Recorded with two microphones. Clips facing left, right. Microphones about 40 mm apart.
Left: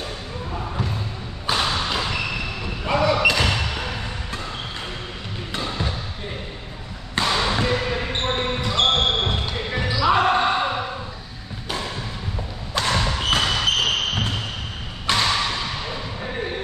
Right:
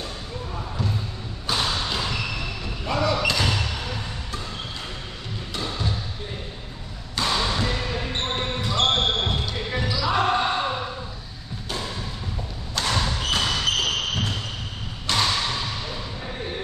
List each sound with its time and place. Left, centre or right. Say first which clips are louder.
1.5 s thump: left 3 dB; left
2.8 s basketball bounce: left 4 dB; left
5.6 s basketball bounce: left 2 dB; left
7.2 s basketball bounce: left 3 dB; left
12.7 s basketball bounce: left 3 dB; left
15.1 s a sound: left 2 dB; left